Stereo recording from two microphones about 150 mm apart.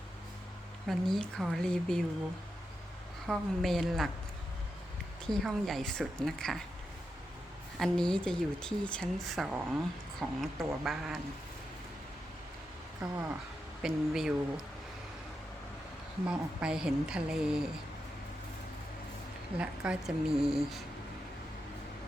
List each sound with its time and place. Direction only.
0.9 s speech: centre (ahead or behind)
3.2 s speech: centre (ahead or behind)
5.2 s speech: 5° left (ahead or behind)
7.8 s speech: 5° left (ahead or behind)
13.0 s speech: 15° right (ahead or behind)
13.8 s speech: 5° right (ahead or behind)
16.2 s speech: 5° right (ahead or behind)
19.5 s speech: 5° right (ahead or behind)